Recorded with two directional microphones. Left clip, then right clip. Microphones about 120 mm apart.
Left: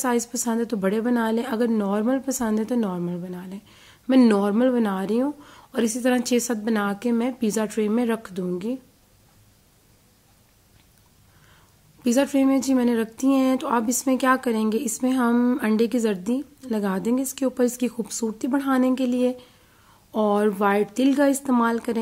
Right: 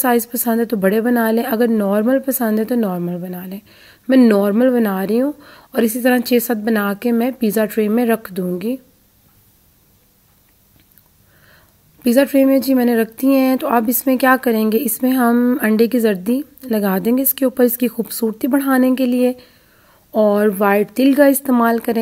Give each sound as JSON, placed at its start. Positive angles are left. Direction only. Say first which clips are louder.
{"t": 0.0, "sound": "a woman's voice", "louder": "right 8 dB", "side_deg": -40}
{"t": 12.0, "sound": "a woman's voice", "louder": "right 8 dB", "side_deg": -35}
{"t": 15.3, "sound": "speech", "louder": "right 6 dB", "side_deg": -25}
{"t": 15.6, "sound": "a woman's voice", "louder": "right 7 dB", "side_deg": -35}